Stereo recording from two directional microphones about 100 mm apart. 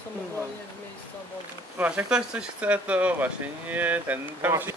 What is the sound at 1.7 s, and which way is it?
Speech, 15° right (ahead or behind).